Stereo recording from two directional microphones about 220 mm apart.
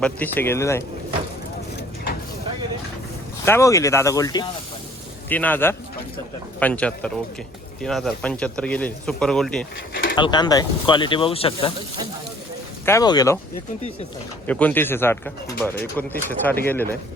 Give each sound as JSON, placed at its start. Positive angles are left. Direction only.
{"t": 0.0, "sound": "speech", "side_deg": 10}
{"t": 3.4, "sound": "speech", "side_deg": 10}
{"t": 10.2, "sound": "speech", "side_deg": 20}
{"t": 12.8, "sound": "speech", "side_deg": 15}
{"t": 14.4, "sound": "speech", "side_deg": 5}